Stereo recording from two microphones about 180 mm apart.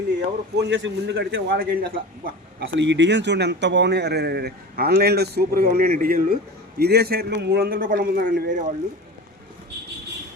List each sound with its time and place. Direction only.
0.5 s a man's voice: 75° right (ahead or behind); by 8.6 s 50° right (ahead or behind)